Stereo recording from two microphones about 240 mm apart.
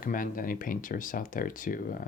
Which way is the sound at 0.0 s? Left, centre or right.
Left.